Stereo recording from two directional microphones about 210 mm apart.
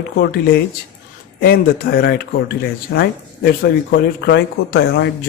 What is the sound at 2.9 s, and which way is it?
Speech, 55° left (ahead or behind).